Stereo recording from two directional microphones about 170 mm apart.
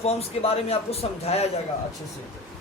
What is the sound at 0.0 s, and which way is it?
Speech, 35° left (ahead or behind).